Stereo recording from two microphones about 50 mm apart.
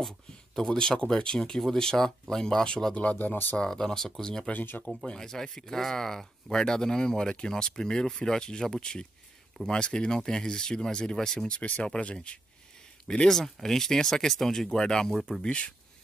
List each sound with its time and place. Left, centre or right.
0.6 s speech: centre
3.0 s speech: left
3.5 s speech: centre
4.5 s speech: left
4.8 s speech: centre
13.3 s speech: centre